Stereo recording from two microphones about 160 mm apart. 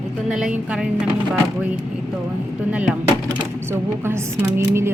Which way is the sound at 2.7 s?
10° right (ahead or behind).